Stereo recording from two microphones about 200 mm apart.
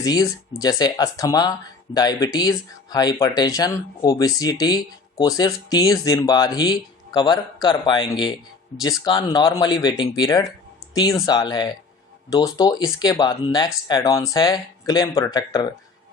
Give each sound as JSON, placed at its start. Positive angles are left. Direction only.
{"t": 0.0, "sound": "speech", "side_deg": 20}